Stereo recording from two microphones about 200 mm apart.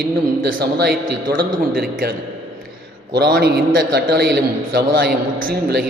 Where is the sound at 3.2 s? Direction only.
50° right (ahead or behind).